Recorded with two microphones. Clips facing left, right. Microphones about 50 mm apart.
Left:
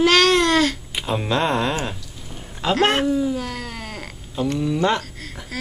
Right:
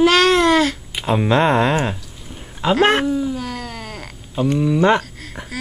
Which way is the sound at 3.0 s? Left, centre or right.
Centre.